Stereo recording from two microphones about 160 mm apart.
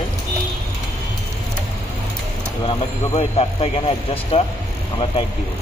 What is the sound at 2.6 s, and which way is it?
Speech, 40° left (ahead or behind).